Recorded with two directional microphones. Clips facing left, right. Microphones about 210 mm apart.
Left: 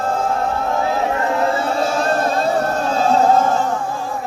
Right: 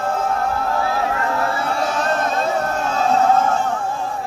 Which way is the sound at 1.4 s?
25° left (ahead or behind).